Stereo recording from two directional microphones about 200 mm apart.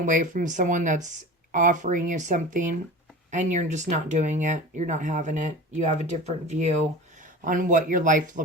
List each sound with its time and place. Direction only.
0.0 s speech: 40° right (ahead or behind)